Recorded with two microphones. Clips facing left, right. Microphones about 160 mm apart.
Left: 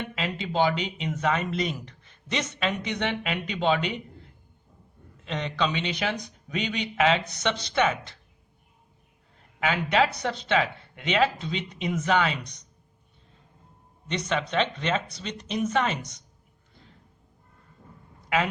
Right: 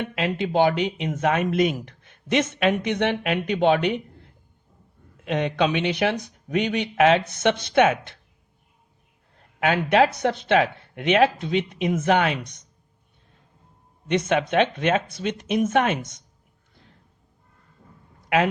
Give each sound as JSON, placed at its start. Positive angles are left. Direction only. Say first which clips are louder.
{"t": 0.1, "sound": "speech", "louder": "right 6 dB", "side_deg": -60}
{"t": 5.2, "sound": "speech", "louder": "right 6 dB", "side_deg": -60}
{"t": 9.6, "sound": "speech", "louder": "right 5 dB", "side_deg": -60}
{"t": 14.1, "sound": "speech", "louder": "right 7 dB", "side_deg": -55}